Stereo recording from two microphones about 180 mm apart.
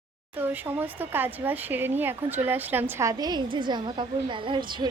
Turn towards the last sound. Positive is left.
turn(degrees=-25)  # may be behind; listen again after turning